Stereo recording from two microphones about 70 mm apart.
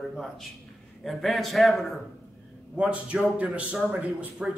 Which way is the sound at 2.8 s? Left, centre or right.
Centre.